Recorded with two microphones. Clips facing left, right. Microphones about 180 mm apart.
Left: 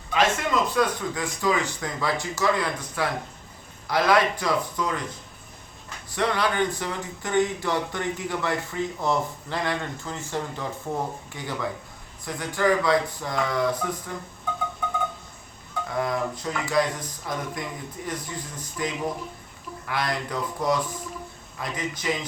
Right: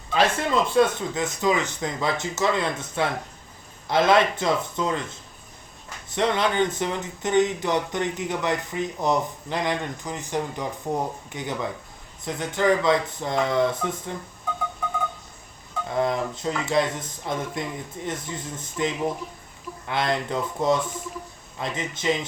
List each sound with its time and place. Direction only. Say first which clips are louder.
0.1 s speech: right 1 dB; 35° right (ahead or behind)
6.1 s speech: right 2 dB; 20° right (ahead or behind)
15.9 s speech: right 3 dB; 25° right (ahead or behind)